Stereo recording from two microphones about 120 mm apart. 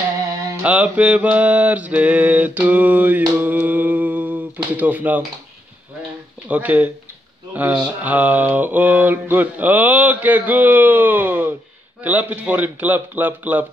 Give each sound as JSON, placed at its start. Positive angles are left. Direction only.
{"t": 0.6, "sound": "mantra", "side_deg": -10}
{"t": 6.5, "sound": "mantra", "side_deg": -15}